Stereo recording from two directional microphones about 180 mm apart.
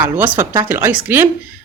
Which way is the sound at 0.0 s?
10° right (ahead or behind).